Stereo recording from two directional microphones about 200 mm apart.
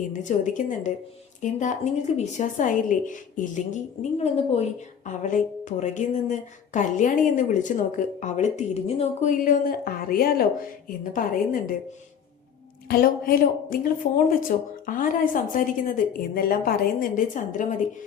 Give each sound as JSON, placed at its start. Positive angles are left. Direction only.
{"t": 0.1, "sound": "a woman's voice", "side_deg": 40}
{"t": 9.4, "sound": "a woman's voice", "side_deg": 45}
{"t": 12.9, "sound": "a woman's voice", "side_deg": 45}